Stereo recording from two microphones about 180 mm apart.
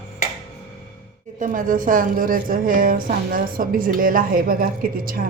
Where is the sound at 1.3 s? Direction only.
45° right (ahead or behind).